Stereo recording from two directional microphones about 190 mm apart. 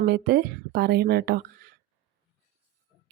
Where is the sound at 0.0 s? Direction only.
55° right (ahead or behind).